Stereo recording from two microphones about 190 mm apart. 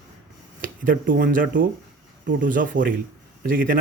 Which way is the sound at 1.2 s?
45° right (ahead or behind).